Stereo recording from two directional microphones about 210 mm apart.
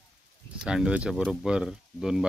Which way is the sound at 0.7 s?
5° right (ahead or behind).